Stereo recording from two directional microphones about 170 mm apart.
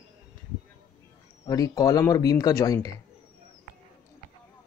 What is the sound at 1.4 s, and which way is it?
Speech, 20° left (ahead or behind).